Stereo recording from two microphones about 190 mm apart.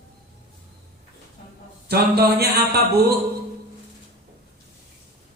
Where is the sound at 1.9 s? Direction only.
55° right (ahead or behind).